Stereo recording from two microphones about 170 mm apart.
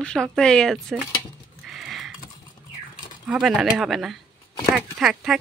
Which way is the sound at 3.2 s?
5° right (ahead or behind).